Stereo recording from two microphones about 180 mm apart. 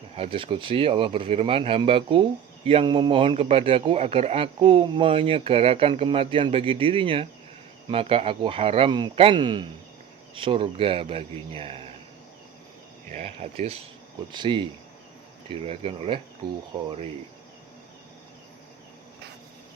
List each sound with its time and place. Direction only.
0.2 s a man's voice: 30° right (ahead or behind)
13.1 s a man's voice: 40° right (ahead or behind)
14.3 s a man's voice: 25° right (ahead or behind)